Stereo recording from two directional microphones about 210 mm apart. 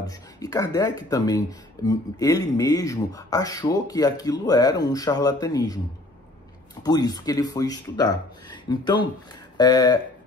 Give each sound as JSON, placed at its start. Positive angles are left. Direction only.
{"t": 0.0, "sound": "speech", "side_deg": 15}
{"t": 6.8, "sound": "speech", "side_deg": 20}